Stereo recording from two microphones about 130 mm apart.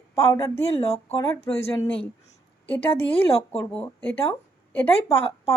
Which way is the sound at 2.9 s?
50° left (ahead or behind).